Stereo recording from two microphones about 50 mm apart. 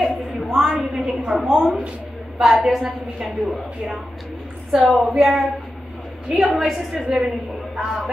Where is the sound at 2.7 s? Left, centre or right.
Centre.